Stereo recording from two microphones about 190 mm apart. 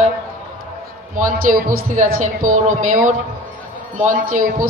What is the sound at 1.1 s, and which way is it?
A woman's voice, 45° right (ahead or behind).